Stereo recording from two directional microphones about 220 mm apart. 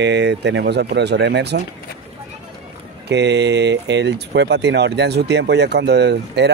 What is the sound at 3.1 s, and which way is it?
Speech, 50° right (ahead or behind).